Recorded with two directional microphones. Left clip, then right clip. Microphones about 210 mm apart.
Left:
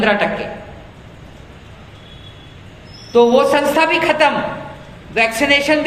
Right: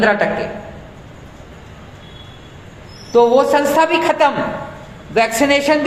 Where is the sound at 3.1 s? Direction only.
40° right (ahead or behind).